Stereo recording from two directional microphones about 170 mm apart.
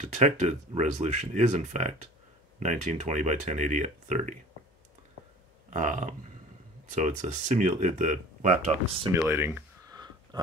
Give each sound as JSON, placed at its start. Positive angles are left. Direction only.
{"t": 0.1, "sound": "speech", "side_deg": -40}
{"t": 5.7, "sound": "speech", "side_deg": -45}
{"t": 9.3, "sound": "speech", "side_deg": -15}
{"t": 10.3, "sound": "a sound", "side_deg": -25}